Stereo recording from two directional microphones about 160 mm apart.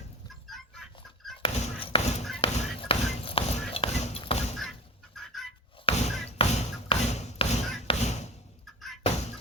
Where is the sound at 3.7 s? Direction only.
35° left (ahead or behind).